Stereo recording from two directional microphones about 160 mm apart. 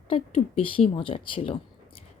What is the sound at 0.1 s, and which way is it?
A woman's voice, 35° left (ahead or behind).